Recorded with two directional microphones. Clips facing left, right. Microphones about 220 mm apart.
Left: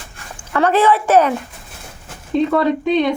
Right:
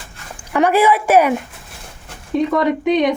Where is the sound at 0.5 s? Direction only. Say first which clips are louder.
Even; 10° right (ahead or behind).